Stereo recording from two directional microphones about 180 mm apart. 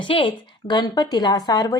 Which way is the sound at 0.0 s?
30° left (ahead or behind).